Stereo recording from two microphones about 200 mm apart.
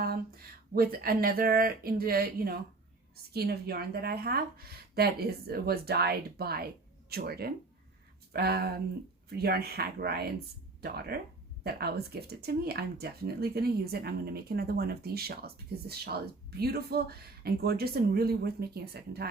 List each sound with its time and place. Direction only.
0.0 s speech: 50° right (ahead or behind)